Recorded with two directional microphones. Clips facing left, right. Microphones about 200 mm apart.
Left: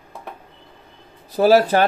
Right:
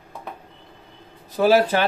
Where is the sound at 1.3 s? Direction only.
40° left (ahead or behind).